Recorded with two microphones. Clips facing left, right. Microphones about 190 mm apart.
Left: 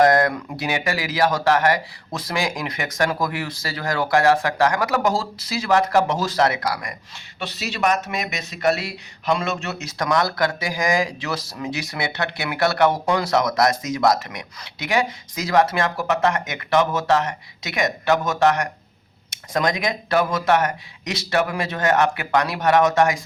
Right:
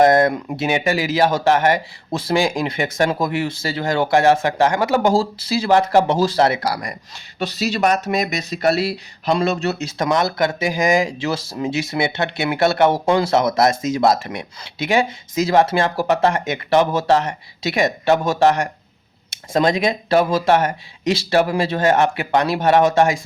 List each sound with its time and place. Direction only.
0.0 s speech: 25° right (ahead or behind)